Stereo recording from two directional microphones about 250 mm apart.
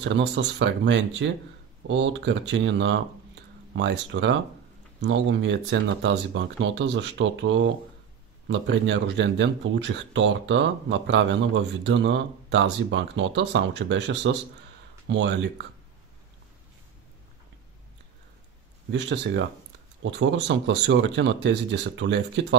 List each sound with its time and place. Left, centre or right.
0.0 s speech: right
18.9 s speech: right